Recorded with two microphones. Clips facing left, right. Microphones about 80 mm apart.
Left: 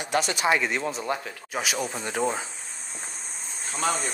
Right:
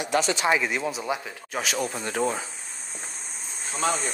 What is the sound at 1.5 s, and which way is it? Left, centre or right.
Speech, centre.